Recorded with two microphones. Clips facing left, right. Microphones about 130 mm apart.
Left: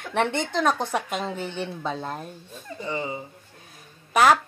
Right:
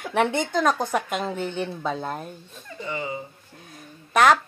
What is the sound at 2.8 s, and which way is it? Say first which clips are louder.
Speech: even; 30° left (ahead or behind).